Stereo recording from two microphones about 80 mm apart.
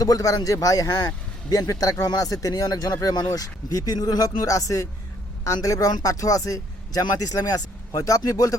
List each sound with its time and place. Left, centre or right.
0.0 s speech: left